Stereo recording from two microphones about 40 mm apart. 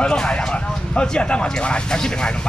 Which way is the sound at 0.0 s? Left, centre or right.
Left.